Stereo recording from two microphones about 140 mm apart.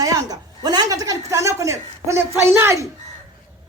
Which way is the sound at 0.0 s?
25° right (ahead or behind).